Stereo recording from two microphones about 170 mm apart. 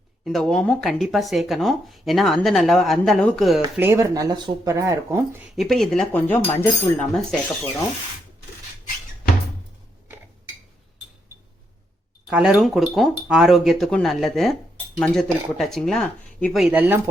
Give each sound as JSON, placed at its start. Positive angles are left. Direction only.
{"t": 0.3, "sound": "speech", "side_deg": 0}
{"t": 3.8, "sound": "speech", "side_deg": -15}
{"t": 5.5, "sound": "speech", "side_deg": 0}
{"t": 12.3, "sound": "speech", "side_deg": -5}